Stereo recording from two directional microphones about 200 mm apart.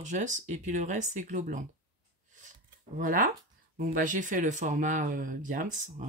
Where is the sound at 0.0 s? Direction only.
40° right (ahead or behind).